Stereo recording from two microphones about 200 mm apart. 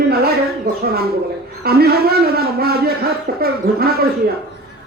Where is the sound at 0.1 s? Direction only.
50° right (ahead or behind).